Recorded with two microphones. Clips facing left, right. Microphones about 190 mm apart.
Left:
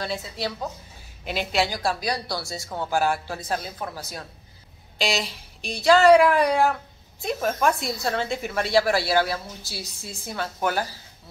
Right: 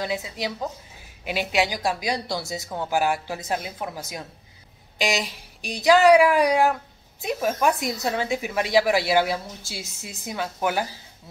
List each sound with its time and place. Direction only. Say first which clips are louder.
0.0 s speech: right 1 dB; 15° right (ahead or behind)